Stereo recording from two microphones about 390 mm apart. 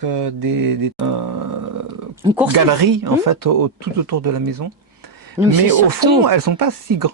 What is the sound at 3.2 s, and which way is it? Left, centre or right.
Speech, right.